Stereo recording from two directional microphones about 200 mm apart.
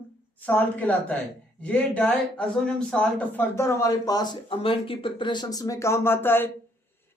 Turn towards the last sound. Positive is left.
turn(degrees=10)  # may be behind; listen again after turning